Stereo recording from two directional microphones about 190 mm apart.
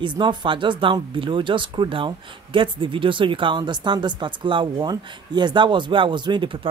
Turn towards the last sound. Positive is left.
turn(degrees=-25)  # may be behind; listen again after turning